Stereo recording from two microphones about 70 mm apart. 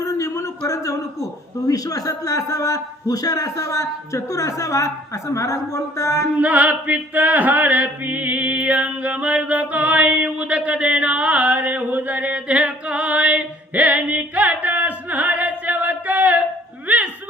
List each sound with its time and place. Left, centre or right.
0.0 s a sound: left
0.7 s a man's voice: left
6.4 s chant: right